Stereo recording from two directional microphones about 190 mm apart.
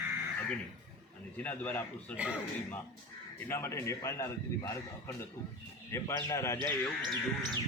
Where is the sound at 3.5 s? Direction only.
15° left (ahead or behind).